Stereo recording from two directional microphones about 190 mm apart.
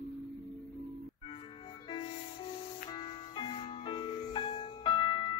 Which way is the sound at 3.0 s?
25° left (ahead or behind).